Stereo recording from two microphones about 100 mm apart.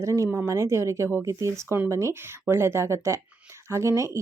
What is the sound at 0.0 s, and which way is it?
Speech, 30° right (ahead or behind).